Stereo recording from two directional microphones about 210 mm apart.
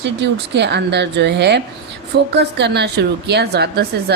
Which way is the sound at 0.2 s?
55° right (ahead or behind).